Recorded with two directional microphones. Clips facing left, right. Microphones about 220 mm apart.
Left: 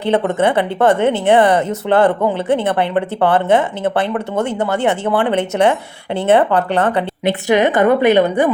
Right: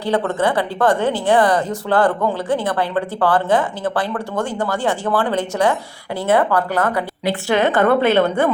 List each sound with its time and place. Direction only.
0.0 s a woman's voice: 25° left (ahead or behind)